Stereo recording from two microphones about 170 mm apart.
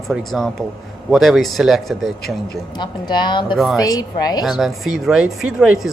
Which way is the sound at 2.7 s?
25° left (ahead or behind).